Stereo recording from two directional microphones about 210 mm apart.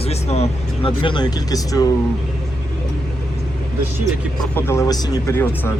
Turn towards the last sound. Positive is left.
turn(degrees=10)  # may be behind; listen again after turning